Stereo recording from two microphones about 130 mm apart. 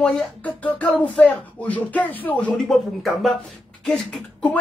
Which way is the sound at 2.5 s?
Centre (ahead or behind).